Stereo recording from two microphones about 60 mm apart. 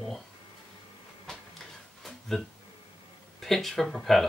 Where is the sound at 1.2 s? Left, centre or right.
Centre.